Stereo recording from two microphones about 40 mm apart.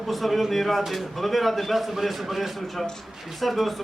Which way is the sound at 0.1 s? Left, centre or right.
Centre.